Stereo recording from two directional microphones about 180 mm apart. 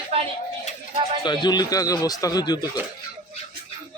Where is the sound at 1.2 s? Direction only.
25° left (ahead or behind).